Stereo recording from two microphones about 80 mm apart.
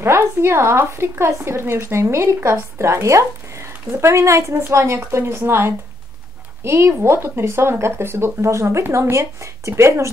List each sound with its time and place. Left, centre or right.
0.0 s speech: right